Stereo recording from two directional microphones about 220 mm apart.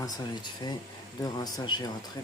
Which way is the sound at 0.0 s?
20° left (ahead or behind).